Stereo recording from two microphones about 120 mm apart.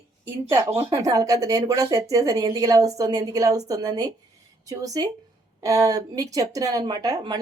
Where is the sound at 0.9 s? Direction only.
30° right (ahead or behind).